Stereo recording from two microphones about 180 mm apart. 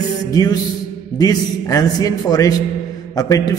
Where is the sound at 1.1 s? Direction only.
20° left (ahead or behind).